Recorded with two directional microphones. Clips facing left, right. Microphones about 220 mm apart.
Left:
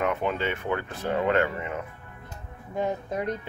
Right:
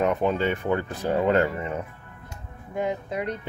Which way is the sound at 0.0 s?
35° right (ahead or behind).